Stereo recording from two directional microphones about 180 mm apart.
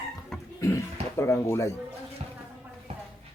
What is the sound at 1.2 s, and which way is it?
Speech, 15° left (ahead or behind).